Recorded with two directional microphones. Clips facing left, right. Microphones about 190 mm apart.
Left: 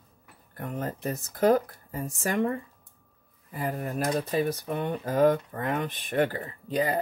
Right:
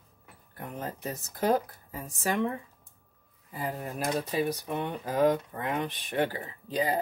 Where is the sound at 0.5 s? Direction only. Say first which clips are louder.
Left 4 dB; 50° left (ahead or behind).